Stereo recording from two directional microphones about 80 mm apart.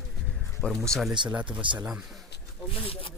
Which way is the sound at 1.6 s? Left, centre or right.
Right.